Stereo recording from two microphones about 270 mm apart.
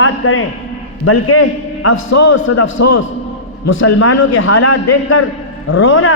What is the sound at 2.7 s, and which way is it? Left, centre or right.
A man's voice, left.